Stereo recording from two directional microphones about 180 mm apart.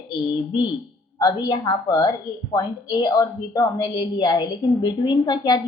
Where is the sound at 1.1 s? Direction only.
25° left (ahead or behind).